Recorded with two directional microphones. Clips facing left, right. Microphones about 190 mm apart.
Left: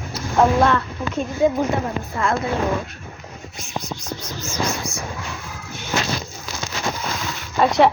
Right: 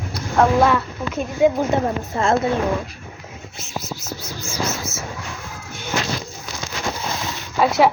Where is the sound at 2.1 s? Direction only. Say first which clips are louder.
Right 2 dB; 25° right (ahead or behind).